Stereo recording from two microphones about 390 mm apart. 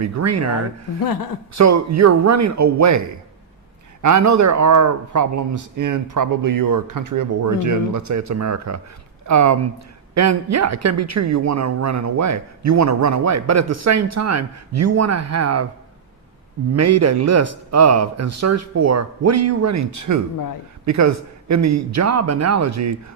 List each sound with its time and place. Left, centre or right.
0.0 s speech: right
1.5 s a woman's voice: right
4.0 s a woman's voice: right
16.7 s a woman's voice: right